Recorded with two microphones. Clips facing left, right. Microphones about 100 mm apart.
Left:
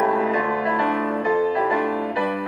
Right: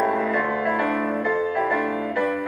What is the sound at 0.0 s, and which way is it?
Music, 10° left (ahead or behind).